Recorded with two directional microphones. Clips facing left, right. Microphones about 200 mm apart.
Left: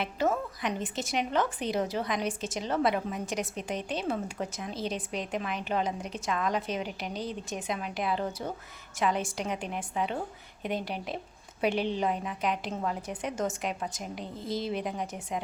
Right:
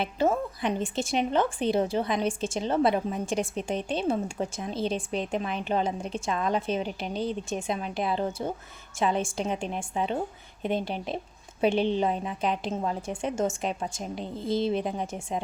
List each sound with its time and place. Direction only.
0.0 s a woman's voice: 30° right (ahead or behind)